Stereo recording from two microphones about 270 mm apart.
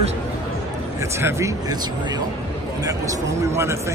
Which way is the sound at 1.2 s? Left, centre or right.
Centre.